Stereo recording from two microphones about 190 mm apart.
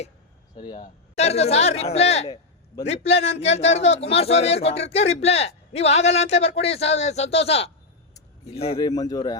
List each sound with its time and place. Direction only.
0.5 s speech: 25° left (ahead or behind)
1.1 s speech: 35° left (ahead or behind)
8.9 s speech: 20° left (ahead or behind)